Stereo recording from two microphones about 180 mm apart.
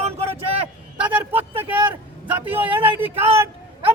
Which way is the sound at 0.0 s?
35° right (ahead or behind).